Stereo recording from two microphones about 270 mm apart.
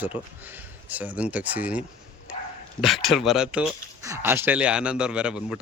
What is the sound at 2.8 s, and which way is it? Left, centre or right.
Speech, centre.